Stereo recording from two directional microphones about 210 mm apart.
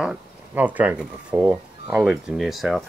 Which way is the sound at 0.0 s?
5° right (ahead or behind).